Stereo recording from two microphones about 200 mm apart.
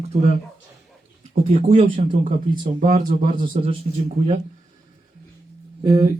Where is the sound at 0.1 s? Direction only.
30° right (ahead or behind).